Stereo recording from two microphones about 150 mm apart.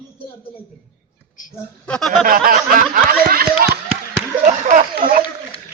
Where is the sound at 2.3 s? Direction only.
70° right (ahead or behind).